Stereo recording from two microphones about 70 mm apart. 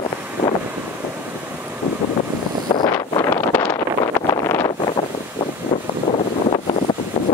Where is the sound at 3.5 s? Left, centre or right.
Left.